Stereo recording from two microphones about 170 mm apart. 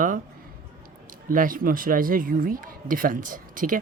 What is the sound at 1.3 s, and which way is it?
Speech, 55° right (ahead or behind).